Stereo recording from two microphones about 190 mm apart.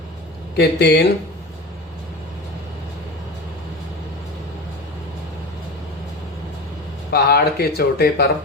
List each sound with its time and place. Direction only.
0.5 s speech: 60° left (ahead or behind)
7.1 s speech: 55° left (ahead or behind)